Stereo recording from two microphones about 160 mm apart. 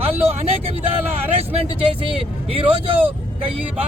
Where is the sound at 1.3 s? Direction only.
40° right (ahead or behind).